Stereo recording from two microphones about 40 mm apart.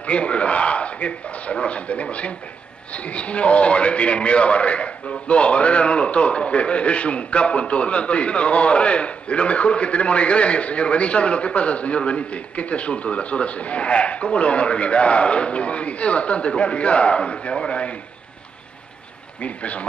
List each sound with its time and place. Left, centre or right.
0.0 s a man's voice: left
19.4 s a man's voice: left